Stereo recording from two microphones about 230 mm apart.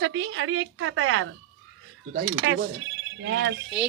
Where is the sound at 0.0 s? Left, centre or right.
Right.